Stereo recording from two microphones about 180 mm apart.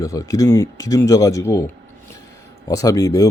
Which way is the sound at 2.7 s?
20° left (ahead or behind).